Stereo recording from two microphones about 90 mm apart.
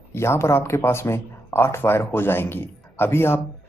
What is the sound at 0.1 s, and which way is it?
Speech, 30° left (ahead or behind).